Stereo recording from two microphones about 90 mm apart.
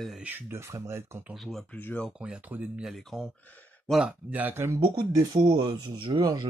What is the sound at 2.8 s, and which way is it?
Speech, centre (ahead or behind).